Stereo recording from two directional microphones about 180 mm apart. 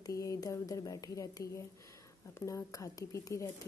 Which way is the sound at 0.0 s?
20° left (ahead or behind).